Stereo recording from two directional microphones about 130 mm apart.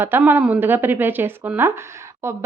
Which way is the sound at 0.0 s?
15° right (ahead or behind).